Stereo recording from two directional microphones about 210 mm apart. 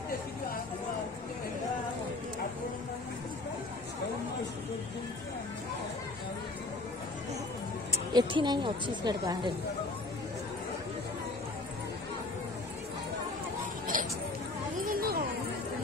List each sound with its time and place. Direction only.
8.1 s speech: 20° right (ahead or behind)
13.9 s a sound: 40° right (ahead or behind)
14.9 s chatter: 45° right (ahead or behind)